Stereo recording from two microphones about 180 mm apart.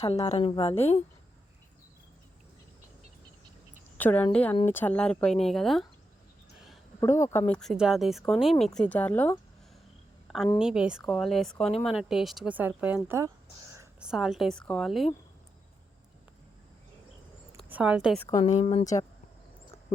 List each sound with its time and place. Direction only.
0.0 s a woman's voice: 35° left (ahead or behind)
3.9 s a woman's voice: 10° left (ahead or behind)
7.0 s speech: 15° left (ahead or behind)
7.5 s speech: centre (ahead or behind)
10.2 s a woman's voice: centre (ahead or behind); by 13.8 s 15° right (ahead or behind)
14.0 s speech: 5° right (ahead or behind)
17.7 s a woman's voice: 10° right (ahead or behind)
18.2 s speech: 15° left (ahead or behind)
18.4 s a woman's voice: 40° left (ahead or behind)